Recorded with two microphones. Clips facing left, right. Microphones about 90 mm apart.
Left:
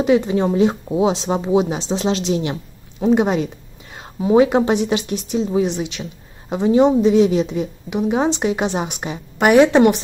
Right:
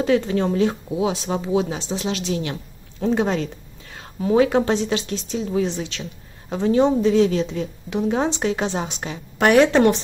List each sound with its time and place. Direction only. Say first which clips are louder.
0.0 s a woman's voice: left 3 dB; 15° left (ahead or behind)